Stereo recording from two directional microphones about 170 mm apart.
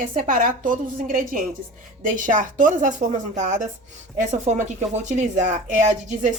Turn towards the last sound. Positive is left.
turn(degrees=-45)  # may be behind; listen again after turning